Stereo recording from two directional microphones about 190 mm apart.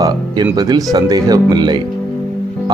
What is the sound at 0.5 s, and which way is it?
Speech, 20° right (ahead or behind).